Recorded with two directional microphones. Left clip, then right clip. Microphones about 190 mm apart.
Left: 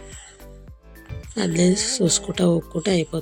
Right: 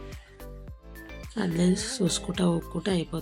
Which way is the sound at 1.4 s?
25° left (ahead or behind).